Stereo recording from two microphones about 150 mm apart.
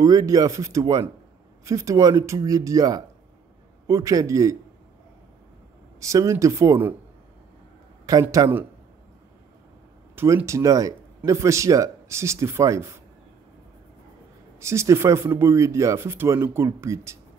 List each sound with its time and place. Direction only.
0.0 s speech: 25° right (ahead or behind)
5.9 s speech: 20° right (ahead or behind)
8.1 s speech: 25° right (ahead or behind)
10.1 s speech: 20° right (ahead or behind)
14.6 s speech: 20° right (ahead or behind)